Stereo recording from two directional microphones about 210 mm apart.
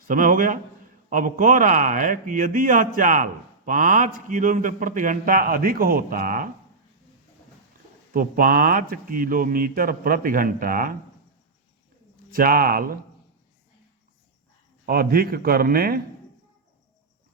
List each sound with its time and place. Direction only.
0.1 s a man's voice: 40° right (ahead or behind)
8.1 s a man's voice: 45° right (ahead or behind)
12.3 s a man's voice: 45° right (ahead or behind)
14.8 s a man's voice: 45° right (ahead or behind)